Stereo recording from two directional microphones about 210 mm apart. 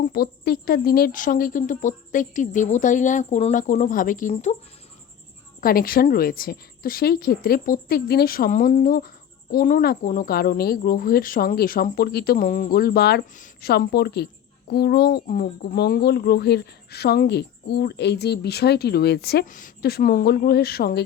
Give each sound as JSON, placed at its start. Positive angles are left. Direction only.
{"t": 0.1, "sound": "a woman's voice", "side_deg": 45}
{"t": 5.5, "sound": "a woman's voice", "side_deg": 45}